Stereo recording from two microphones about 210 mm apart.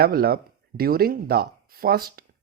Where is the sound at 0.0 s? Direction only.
45° right (ahead or behind).